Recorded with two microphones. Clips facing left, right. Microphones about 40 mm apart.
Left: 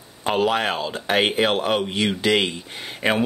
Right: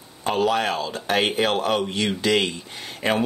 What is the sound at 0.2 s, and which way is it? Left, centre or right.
Speech, left.